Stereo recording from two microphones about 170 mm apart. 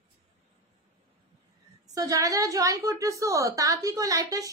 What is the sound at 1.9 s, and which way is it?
A woman's voice, 20° right (ahead or behind).